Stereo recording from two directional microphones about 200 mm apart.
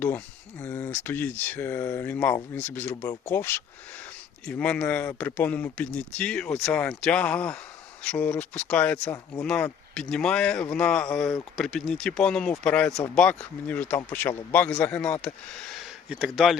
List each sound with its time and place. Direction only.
0.6 s speech: 10° left (ahead or behind)
2.9 s speech: 20° left (ahead or behind); by 16.6 s centre (ahead or behind)